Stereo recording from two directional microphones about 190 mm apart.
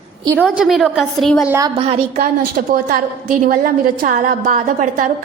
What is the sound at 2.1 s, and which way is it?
A woman's voice, 45° right (ahead or behind).